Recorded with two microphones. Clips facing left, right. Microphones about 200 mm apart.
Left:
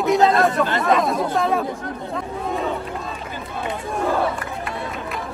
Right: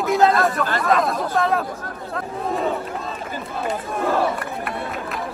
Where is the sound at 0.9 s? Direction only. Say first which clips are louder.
Right 1 dB; centre (ahead or behind).